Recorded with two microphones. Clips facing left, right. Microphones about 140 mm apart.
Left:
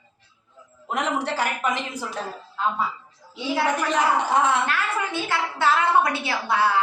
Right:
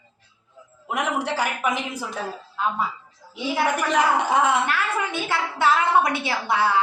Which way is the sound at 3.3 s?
15° right (ahead or behind).